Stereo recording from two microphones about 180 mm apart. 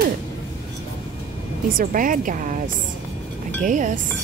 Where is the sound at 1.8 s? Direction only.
50° right (ahead or behind).